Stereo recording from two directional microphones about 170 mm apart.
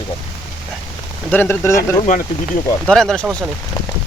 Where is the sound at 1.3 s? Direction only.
10° left (ahead or behind).